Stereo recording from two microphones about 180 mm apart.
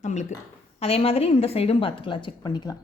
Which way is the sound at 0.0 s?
40° left (ahead or behind).